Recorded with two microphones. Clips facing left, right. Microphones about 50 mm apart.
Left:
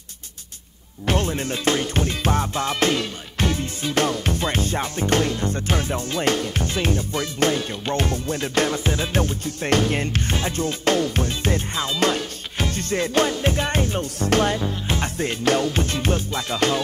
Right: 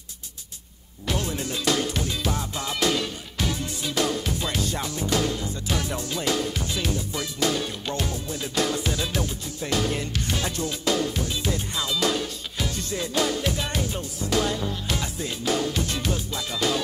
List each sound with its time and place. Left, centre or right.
1.0 s music: left
5.8 s music: left